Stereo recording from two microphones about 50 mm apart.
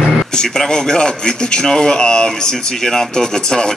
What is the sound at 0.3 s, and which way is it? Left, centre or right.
A man's voice, centre.